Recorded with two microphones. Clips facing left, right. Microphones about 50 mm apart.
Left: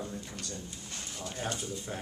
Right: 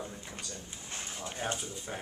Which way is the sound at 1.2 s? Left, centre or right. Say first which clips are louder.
Even; right.